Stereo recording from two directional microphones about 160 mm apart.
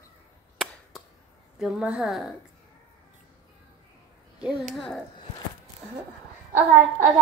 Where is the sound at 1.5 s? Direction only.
5° right (ahead or behind).